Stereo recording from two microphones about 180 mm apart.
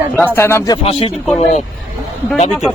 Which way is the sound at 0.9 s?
30° left (ahead or behind).